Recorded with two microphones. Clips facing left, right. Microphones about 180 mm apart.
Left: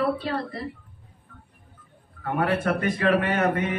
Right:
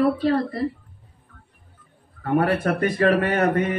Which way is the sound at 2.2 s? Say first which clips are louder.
Right 4 dB; 40° right (ahead or behind).